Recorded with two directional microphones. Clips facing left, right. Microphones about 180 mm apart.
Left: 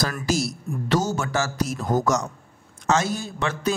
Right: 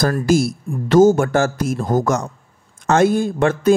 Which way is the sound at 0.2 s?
55° right (ahead or behind).